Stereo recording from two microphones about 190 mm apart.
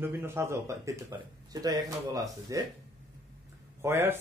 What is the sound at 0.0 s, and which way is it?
A man's voice, 15° right (ahead or behind).